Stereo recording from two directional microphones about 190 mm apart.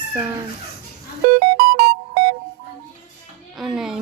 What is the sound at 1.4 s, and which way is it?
Music, 55° right (ahead or behind).